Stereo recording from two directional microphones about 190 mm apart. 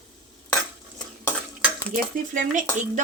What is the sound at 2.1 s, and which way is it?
Speech, 45° right (ahead or behind).